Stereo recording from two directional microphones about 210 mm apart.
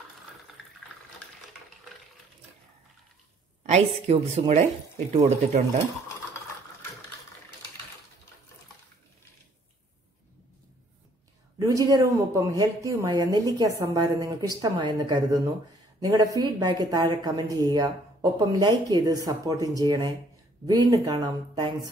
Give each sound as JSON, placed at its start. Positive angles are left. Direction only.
{"t": 3.6, "sound": "a woman's voice", "side_deg": -30}
{"t": 11.5, "sound": "speech", "side_deg": -15}